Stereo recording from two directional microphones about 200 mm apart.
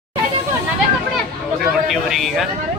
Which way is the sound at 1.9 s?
Centre (ahead or behind).